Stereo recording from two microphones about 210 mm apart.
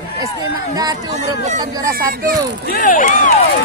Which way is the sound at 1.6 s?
15° right (ahead or behind).